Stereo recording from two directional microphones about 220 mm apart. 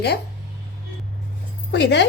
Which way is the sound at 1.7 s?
50° left (ahead or behind).